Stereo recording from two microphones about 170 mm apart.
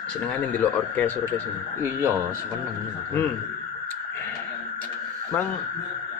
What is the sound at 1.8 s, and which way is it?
Speech, 15° right (ahead or behind).